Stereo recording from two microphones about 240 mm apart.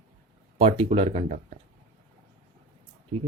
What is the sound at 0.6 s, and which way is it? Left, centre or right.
Speech, right.